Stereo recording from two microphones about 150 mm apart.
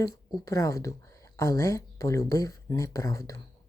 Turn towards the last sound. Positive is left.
turn(degrees=20)  # may be behind; listen again after turning